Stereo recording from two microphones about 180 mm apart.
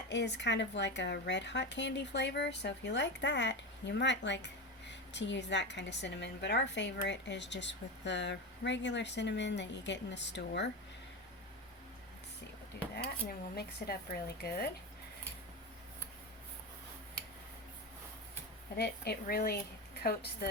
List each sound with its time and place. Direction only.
0.1 s speech: 75° left (ahead or behind)
13.0 s a woman's voice: 60° left (ahead or behind)
18.8 s a woman's voice: 60° left (ahead or behind)